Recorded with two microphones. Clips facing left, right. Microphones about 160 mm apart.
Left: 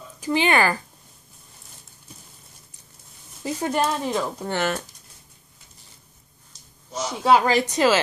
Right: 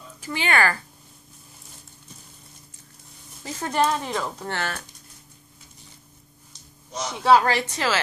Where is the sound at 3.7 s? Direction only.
5° left (ahead or behind).